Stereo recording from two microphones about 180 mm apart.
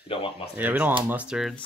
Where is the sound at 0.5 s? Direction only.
10° right (ahead or behind).